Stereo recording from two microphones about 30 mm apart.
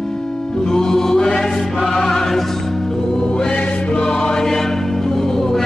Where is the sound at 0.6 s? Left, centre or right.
Centre.